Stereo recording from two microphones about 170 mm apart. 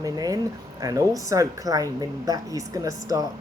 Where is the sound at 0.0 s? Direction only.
20° right (ahead or behind).